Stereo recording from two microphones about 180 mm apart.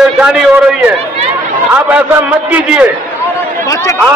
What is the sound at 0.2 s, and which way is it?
Speech, 5° right (ahead or behind).